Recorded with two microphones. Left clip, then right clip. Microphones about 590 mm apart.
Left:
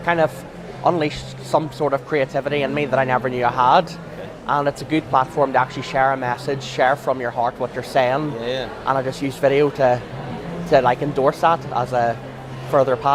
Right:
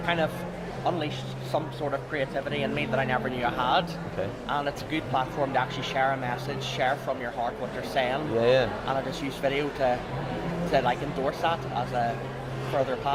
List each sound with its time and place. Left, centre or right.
0.0 s a man's voice: left
8.4 s a man's voice: right
8.9 s speech: left